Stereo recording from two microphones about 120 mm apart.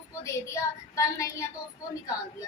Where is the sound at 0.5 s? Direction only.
25° left (ahead or behind).